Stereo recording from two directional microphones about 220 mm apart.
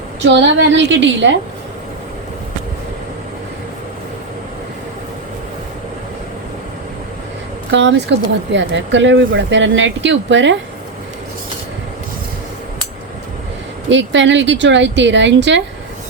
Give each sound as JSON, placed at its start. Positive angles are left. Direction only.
{"t": 0.2, "sound": "speech", "side_deg": -55}
{"t": 7.7, "sound": "a woman's voice", "side_deg": -55}
{"t": 13.9, "sound": "speech", "side_deg": -55}